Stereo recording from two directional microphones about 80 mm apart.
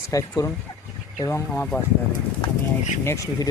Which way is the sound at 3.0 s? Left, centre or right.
Left.